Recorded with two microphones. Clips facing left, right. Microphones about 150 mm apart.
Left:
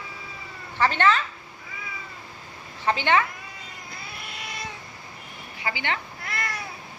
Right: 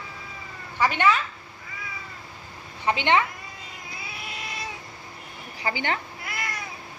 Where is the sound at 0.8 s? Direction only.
10° right (ahead or behind).